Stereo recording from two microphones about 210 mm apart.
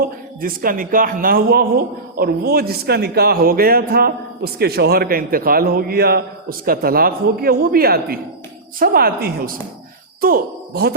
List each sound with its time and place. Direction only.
0.4 s a man's voice: 40° right (ahead or behind)